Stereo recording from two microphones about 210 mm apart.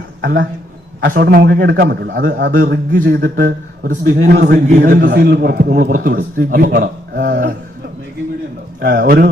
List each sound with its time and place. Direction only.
0.2 s a man's voice: 60° right (ahead or behind)
1.1 s a man's voice: 50° right (ahead or behind)
2.9 s a man's voice: 45° right (ahead or behind)
8.8 s a man's voice: 45° right (ahead or behind)